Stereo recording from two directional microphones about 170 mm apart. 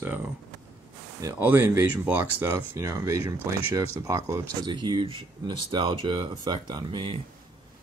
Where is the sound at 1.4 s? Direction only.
15° right (ahead or behind).